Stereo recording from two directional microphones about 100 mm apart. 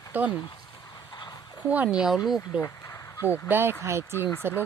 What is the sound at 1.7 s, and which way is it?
Speech, 10° right (ahead or behind).